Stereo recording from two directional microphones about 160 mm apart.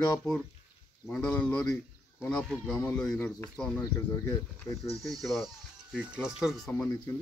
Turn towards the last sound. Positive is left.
turn(degrees=5)  # may be behind; listen again after turning